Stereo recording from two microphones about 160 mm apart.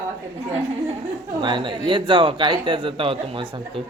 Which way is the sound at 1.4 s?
30° right (ahead or behind).